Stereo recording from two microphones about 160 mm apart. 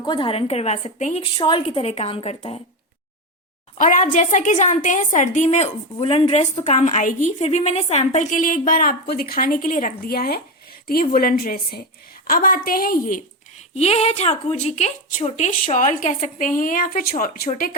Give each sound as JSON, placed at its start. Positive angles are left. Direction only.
{"t": 0.0, "sound": "a woman's voice", "side_deg": 30}
{"t": 1.4, "sound": "a woman's voice", "side_deg": 30}
{"t": 3.8, "sound": "a woman's voice", "side_deg": 55}
{"t": 13.7, "sound": "a woman's voice", "side_deg": 40}